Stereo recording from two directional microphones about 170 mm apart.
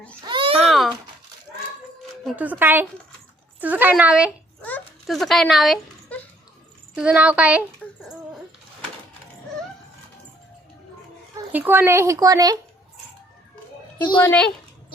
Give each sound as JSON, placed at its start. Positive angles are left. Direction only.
{"t": 0.3, "sound": "babbling", "side_deg": -30}
{"t": 0.7, "sound": "a sound", "side_deg": 0}
{"t": 2.2, "sound": "speech", "side_deg": -10}
{"t": 7.8, "sound": "a sound", "side_deg": 5}
{"t": 11.5, "sound": "speech", "side_deg": -10}
{"t": 14.2, "sound": "speech", "side_deg": 10}